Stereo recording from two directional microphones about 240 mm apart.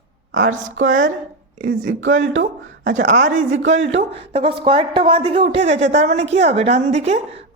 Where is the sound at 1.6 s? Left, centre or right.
Right.